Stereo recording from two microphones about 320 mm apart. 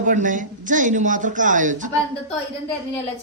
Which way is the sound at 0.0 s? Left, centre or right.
Right.